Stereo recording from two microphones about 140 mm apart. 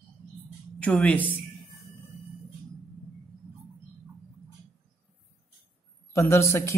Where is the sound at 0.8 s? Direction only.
10° left (ahead or behind).